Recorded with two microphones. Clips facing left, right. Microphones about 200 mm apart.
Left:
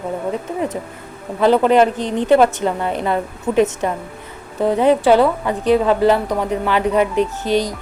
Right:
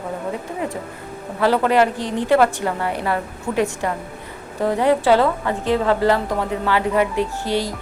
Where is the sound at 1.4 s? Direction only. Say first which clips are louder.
Left 4 dB; 20° left (ahead or behind).